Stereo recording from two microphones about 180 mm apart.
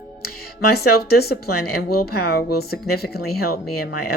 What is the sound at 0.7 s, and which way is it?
Speech, 60° left (ahead or behind).